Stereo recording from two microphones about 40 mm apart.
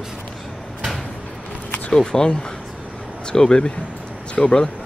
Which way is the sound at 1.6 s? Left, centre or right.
Left.